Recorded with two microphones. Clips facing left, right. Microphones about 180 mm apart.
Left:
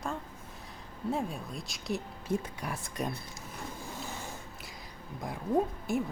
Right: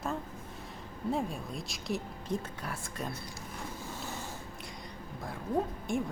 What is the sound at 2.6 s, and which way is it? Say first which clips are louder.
Speech: left 3 dB; 15° left (ahead or behind).